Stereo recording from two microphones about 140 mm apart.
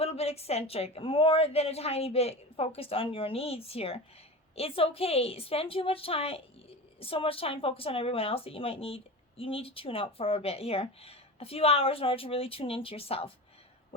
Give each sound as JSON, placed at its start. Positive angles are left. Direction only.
{"t": 0.0, "sound": "a woman's voice", "side_deg": 45}